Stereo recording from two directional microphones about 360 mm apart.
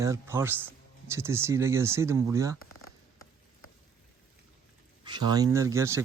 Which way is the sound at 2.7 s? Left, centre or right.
Left.